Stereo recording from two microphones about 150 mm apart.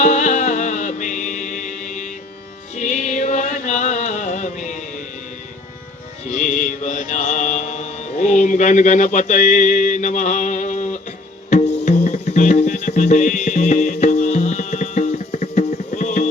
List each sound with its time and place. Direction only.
0.0 s music: 50° left (ahead or behind)
6.3 s mantra: 55° left (ahead or behind)
11.4 s music: 50° left (ahead or behind)